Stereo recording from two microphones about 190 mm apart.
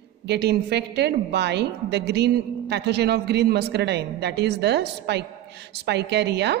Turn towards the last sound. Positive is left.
turn(degrees=-65)  # may be behind; listen again after turning